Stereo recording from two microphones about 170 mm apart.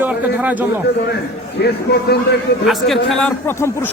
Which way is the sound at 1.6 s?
70° left (ahead or behind).